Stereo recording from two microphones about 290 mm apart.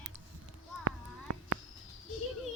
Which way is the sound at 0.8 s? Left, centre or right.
Right.